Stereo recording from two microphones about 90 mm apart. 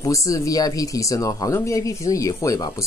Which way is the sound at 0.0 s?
40° left (ahead or behind).